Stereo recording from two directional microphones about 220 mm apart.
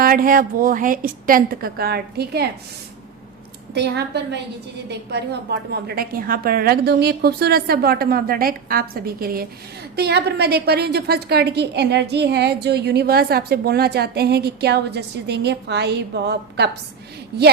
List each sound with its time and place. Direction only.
0.0 s a woman's voice: 40° right (ahead or behind)
3.8 s a woman's voice: 50° right (ahead or behind)